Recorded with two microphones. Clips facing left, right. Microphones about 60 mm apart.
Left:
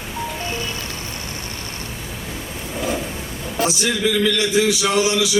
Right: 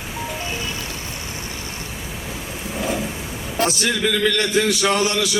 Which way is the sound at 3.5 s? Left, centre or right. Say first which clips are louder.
Even; right.